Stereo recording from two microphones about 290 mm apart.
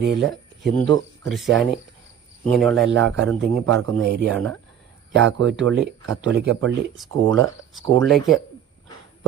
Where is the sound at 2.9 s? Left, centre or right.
Right.